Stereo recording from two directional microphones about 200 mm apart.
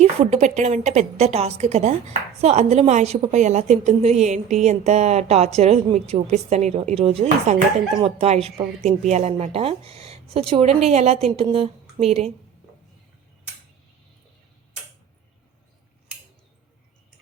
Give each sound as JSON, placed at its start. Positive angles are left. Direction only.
{"t": 0.0, "sound": "a woman's voice", "side_deg": -35}